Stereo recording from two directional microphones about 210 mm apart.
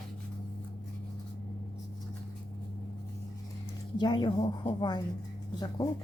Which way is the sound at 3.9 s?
20° left (ahead or behind).